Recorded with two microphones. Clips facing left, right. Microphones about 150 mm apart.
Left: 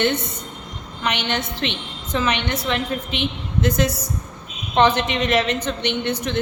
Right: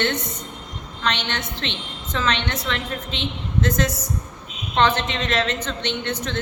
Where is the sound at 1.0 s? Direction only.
10° left (ahead or behind).